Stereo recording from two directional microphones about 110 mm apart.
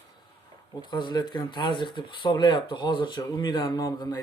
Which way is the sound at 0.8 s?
45° left (ahead or behind).